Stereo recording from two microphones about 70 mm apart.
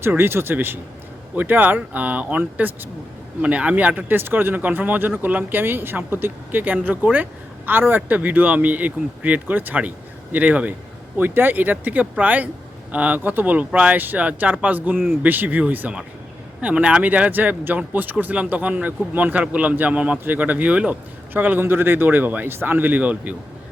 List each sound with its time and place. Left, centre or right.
0.2 s speech: right